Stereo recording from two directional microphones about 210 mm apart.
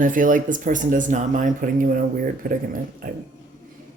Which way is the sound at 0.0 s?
40° right (ahead or behind).